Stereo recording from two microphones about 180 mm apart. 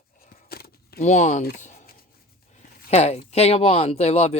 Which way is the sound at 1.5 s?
40° left (ahead or behind).